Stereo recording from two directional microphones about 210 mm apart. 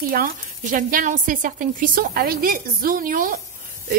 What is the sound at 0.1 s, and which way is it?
Speech, 40° right (ahead or behind).